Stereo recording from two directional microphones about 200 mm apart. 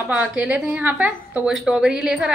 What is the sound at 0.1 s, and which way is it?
A woman's voice, 5° right (ahead or behind).